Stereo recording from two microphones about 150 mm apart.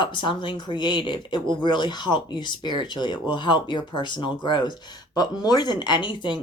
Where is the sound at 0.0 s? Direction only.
30° left (ahead or behind).